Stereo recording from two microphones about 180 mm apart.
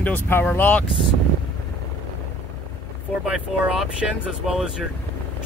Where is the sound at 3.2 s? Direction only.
5° right (ahead or behind).